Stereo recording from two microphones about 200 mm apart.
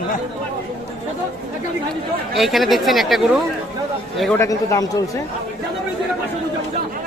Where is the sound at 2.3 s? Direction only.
Centre (ahead or behind).